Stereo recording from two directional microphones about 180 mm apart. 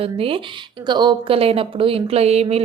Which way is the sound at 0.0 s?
30° right (ahead or behind).